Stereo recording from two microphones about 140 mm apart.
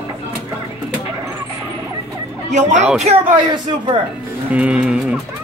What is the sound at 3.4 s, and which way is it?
Speech, 35° right (ahead or behind).